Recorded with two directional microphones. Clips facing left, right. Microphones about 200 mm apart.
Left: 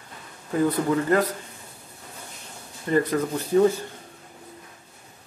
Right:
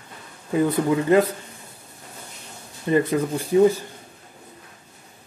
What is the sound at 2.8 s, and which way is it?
Speech, 15° right (ahead or behind).